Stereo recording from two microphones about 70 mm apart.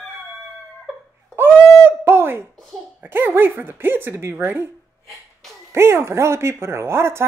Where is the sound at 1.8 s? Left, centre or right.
Right.